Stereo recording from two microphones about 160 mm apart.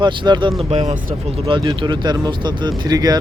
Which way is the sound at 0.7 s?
40° right (ahead or behind).